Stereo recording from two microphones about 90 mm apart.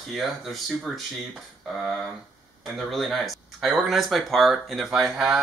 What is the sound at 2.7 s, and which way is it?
Speech, centre (ahead or behind).